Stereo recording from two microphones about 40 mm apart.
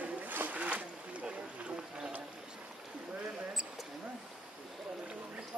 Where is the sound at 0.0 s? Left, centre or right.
Right.